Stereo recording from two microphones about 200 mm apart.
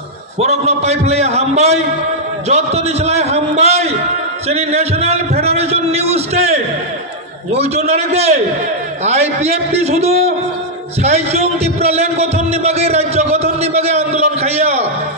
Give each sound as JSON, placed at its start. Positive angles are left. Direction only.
{"t": 0.4, "sound": "a man's voice", "side_deg": -35}